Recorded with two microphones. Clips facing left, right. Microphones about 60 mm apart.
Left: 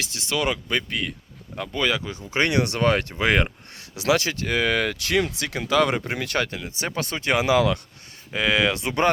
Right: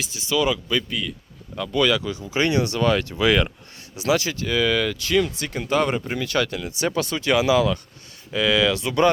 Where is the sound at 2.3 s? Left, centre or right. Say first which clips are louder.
Even; left.